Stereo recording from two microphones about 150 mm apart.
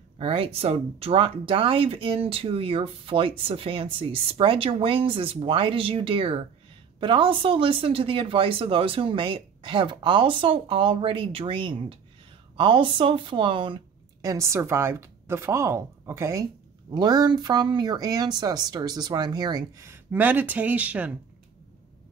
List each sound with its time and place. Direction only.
0.2 s speech: 40° right (ahead or behind)
14.2 s speech: 20° right (ahead or behind)